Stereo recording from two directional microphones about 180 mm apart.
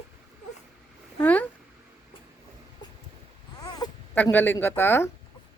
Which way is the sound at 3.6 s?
20° left (ahead or behind).